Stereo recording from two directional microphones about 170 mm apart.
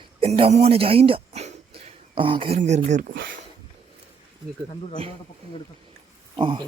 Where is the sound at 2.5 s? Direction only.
45° right (ahead or behind).